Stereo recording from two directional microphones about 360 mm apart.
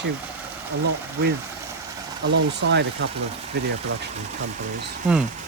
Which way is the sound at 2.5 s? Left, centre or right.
Right.